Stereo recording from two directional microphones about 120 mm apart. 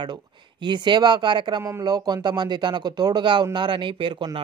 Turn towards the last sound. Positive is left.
turn(degrees=-45)  # may be behind; listen again after turning